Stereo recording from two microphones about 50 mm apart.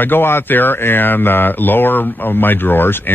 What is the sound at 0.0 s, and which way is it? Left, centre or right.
Speech, left.